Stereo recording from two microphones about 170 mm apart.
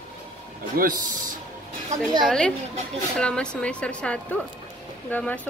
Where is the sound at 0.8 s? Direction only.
55° right (ahead or behind).